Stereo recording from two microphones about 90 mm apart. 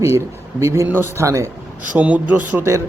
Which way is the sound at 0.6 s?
35° right (ahead or behind).